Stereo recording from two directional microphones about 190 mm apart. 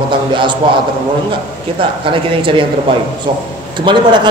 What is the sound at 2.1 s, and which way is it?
Speech, 25° right (ahead or behind).